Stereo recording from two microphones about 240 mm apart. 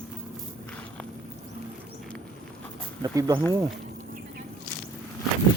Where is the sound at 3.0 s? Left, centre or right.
Centre.